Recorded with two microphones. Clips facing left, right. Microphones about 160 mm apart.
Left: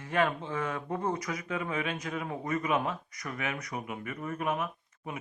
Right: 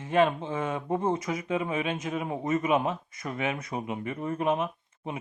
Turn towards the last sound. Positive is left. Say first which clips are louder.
# right 4 dB
turn(degrees=-25)  # may be behind; listen again after turning